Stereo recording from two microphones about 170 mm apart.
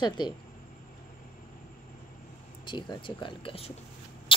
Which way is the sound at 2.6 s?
25° left (ahead or behind).